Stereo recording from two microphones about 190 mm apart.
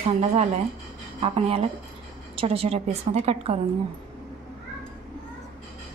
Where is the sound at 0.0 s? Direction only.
35° right (ahead or behind).